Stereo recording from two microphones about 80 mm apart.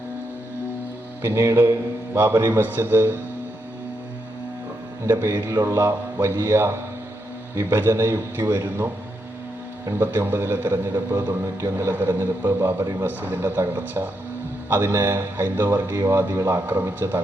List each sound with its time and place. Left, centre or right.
1.2 s a man's voice: right
2.1 s a man's voice: right
5.0 s a man's voice: right